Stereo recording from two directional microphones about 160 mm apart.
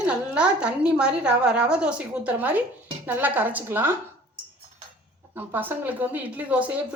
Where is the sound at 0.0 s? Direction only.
5° right (ahead or behind).